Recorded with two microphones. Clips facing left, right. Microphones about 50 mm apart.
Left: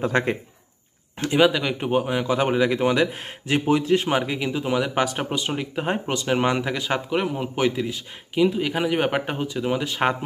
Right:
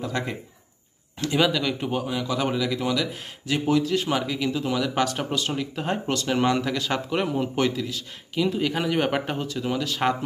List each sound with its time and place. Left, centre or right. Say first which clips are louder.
0.0 s a man's voice: left 7 dB; left
1.1 s speech: left 4 dB; left
7.1 s speech: left 1 dB; centre
7.7 s speech: left 3 dB; left
8.5 s speech: left 2 dB; centre